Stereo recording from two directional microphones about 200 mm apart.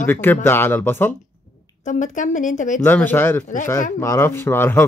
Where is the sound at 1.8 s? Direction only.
40° left (ahead or behind).